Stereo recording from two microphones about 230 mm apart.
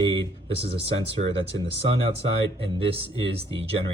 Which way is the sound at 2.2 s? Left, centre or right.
Right.